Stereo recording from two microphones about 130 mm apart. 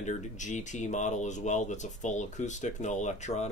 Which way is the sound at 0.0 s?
70° left (ahead or behind).